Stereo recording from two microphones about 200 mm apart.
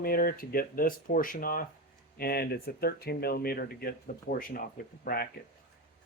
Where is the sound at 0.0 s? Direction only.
45° left (ahead or behind).